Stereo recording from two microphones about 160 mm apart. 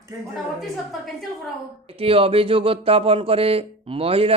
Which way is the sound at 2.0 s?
35° right (ahead or behind).